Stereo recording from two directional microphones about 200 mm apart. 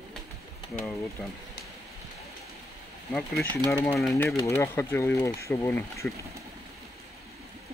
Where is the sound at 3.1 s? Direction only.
Centre (ahead or behind).